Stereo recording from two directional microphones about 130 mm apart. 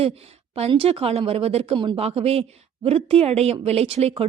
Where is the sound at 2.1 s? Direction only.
50° right (ahead or behind).